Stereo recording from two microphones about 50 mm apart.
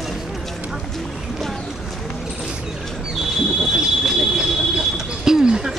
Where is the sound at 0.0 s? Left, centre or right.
Centre.